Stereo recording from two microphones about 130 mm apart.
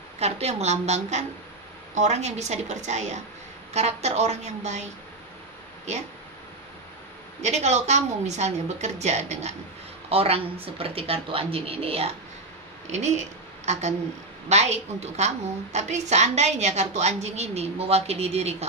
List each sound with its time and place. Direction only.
0.2 s a woman's voice: 55° right (ahead or behind)
5.9 s a woman's voice: 60° right (ahead or behind)
7.4 s a woman's voice: 60° right (ahead or behind)
12.9 s a woman's voice: 60° right (ahead or behind)